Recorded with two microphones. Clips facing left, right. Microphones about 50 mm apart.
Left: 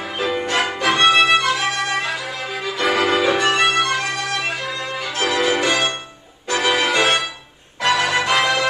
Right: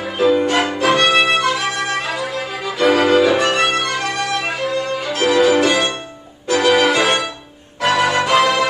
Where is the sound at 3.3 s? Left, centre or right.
Centre.